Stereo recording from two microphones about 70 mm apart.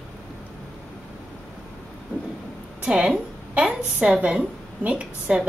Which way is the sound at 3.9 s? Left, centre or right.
Centre.